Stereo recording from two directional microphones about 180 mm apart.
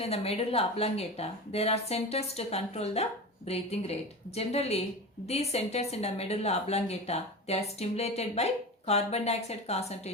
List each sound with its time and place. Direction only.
0.0 s speech: 35° left (ahead or behind)